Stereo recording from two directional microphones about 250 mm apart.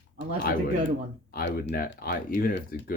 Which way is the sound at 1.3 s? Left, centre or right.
Left.